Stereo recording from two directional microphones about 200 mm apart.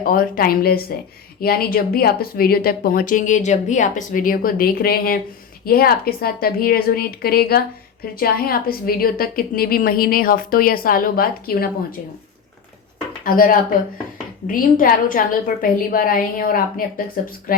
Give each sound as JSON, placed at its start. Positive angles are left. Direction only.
{"t": 0.0, "sound": "speech", "side_deg": 45}
{"t": 13.2, "sound": "speech", "side_deg": 45}